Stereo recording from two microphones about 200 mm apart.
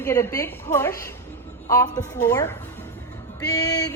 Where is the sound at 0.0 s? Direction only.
15° left (ahead or behind).